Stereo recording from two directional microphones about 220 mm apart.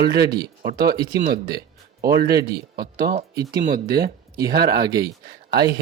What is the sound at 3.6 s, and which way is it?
Speech, 40° right (ahead or behind).